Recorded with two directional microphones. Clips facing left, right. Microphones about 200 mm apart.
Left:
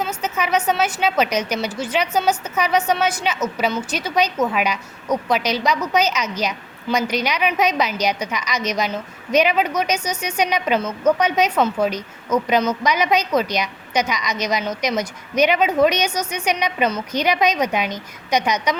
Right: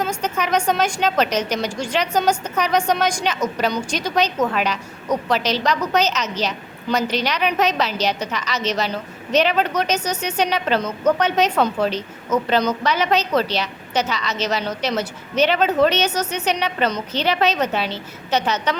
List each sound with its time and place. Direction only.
0.2 s a woman's voice: 5° left (ahead or behind)